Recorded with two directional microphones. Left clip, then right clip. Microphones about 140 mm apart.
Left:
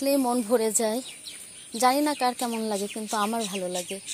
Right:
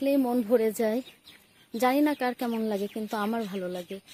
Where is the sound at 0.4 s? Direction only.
35° right (ahead or behind).